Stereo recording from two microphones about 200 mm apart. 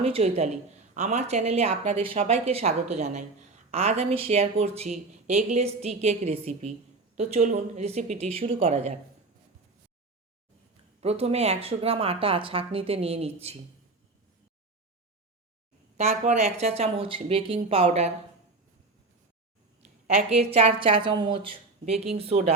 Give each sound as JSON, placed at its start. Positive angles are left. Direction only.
{"t": 0.0, "sound": "speech", "side_deg": -30}
{"t": 11.0, "sound": "speech", "side_deg": -30}
{"t": 16.0, "sound": "speech", "side_deg": -35}
{"t": 20.1, "sound": "speech", "side_deg": -30}